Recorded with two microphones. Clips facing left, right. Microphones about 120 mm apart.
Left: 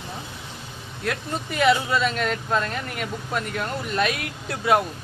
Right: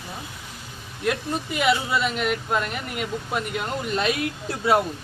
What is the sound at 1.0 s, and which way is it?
Speech, 10° right (ahead or behind).